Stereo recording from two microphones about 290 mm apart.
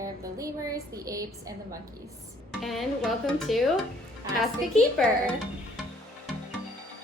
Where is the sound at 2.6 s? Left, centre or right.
Centre.